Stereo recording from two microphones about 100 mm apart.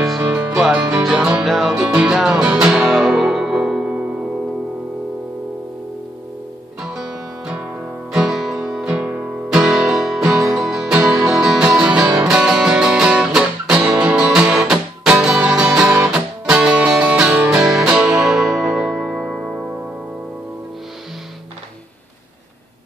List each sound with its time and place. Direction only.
0.2 s music: 20° right (ahead or behind)
0.9 s music: 5° right (ahead or behind)
6.8 s music: 5° right (ahead or behind)
9.5 s music: 5° right (ahead or behind)
18.9 s music: 15° right (ahead or behind)